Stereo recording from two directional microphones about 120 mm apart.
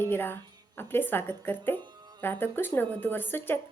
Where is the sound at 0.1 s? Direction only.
15° left (ahead or behind).